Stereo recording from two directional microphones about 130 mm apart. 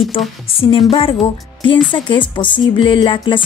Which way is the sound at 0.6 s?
45° left (ahead or behind).